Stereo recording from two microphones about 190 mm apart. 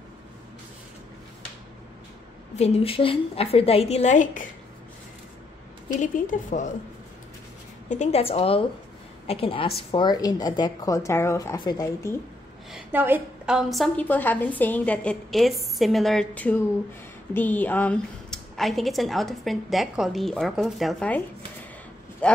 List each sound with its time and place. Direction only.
2.5 s a woman's voice: 35° left (ahead or behind)
5.9 s a woman's voice: 45° left (ahead or behind)
7.9 s a woman's voice: 35° left (ahead or behind); by 12.2 s 15° left (ahead or behind)
12.7 s a woman's voice: 10° right (ahead or behind)
22.2 s speech: 5° left (ahead or behind)